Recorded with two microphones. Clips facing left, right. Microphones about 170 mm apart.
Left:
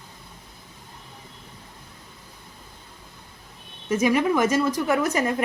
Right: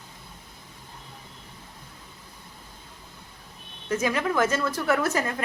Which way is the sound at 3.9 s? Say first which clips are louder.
Left 5 dB; 15° left (ahead or behind).